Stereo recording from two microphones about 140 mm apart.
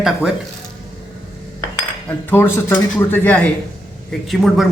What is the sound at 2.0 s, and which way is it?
Speech, 15° left (ahead or behind).